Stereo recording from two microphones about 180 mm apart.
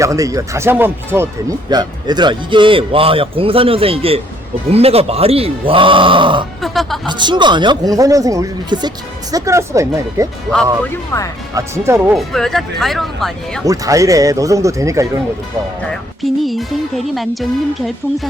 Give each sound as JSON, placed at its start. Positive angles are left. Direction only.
{"t": 0.0, "sound": "speech", "side_deg": -20}
{"t": 6.6, "sound": "speech", "side_deg": 0}
{"t": 7.1, "sound": "speech", "side_deg": -25}
{"t": 10.8, "sound": "speech", "side_deg": 15}
{"t": 11.5, "sound": "speech", "side_deg": -15}
{"t": 12.1, "sound": "speech", "side_deg": 0}
{"t": 13.7, "sound": "speech", "side_deg": -20}
{"t": 15.9, "sound": "speech", "side_deg": 0}